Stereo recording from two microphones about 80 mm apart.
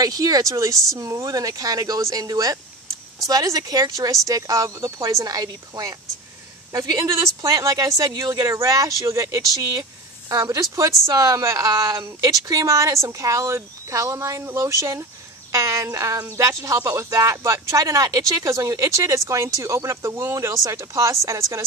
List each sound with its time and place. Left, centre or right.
0.0 s speech: right
20.3 s speech: right